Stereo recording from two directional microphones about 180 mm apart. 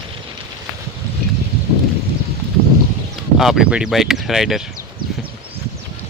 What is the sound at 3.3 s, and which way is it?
Speech, centre (ahead or behind).